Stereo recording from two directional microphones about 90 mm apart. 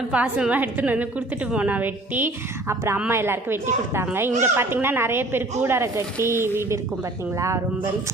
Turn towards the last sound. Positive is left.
turn(degrees=-35)  # may be behind; listen again after turning